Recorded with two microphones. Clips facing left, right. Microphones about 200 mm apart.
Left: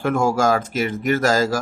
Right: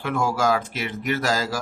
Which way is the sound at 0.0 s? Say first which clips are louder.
Left 4 dB; 45° left (ahead or behind).